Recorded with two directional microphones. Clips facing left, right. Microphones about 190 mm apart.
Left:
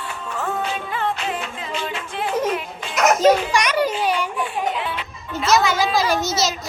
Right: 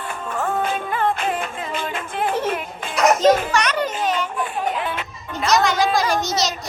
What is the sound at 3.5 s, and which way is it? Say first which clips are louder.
Children playing: left 2 dB; 10° left (ahead or behind).